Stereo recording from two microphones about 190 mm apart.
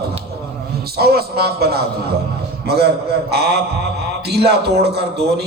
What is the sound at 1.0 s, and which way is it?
Speech, 55° right (ahead or behind).